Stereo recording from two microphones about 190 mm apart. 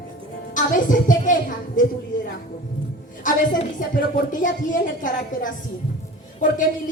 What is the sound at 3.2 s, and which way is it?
A woman's voice, 45° left (ahead or behind).